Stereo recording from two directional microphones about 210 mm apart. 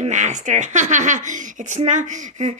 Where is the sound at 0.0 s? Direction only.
35° right (ahead or behind).